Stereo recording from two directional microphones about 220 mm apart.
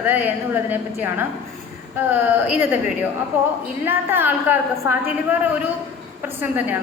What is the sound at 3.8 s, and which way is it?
A woman's voice, 10° right (ahead or behind).